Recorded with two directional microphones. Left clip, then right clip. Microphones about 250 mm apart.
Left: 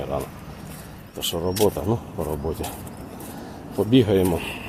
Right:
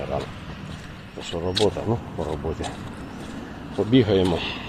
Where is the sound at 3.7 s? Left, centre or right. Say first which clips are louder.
Left 1 dB; centre.